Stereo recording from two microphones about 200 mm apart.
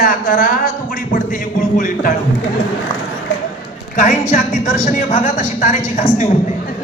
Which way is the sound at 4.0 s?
40° left (ahead or behind).